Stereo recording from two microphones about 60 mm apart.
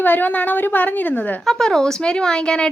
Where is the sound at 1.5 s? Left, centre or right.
Centre.